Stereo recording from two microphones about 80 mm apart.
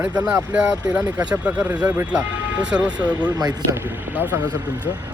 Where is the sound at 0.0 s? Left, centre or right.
Centre.